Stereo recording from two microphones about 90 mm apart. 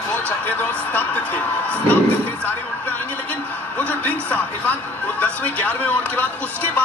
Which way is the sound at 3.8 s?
15° left (ahead or behind).